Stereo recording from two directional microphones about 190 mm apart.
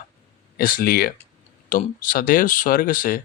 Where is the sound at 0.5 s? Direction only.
50° left (ahead or behind).